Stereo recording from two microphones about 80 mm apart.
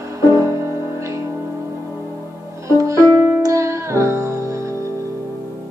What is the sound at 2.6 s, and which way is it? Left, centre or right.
Music, right.